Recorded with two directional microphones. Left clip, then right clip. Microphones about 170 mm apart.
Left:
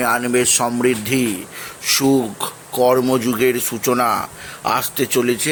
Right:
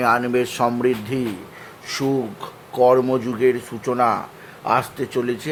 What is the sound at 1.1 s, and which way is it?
Speech, 20° left (ahead or behind).